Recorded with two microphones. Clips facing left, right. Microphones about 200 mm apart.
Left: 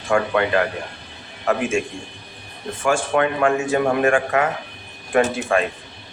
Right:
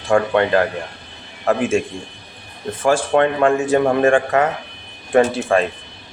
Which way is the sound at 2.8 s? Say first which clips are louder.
Right 4 dB; 35° right (ahead or behind).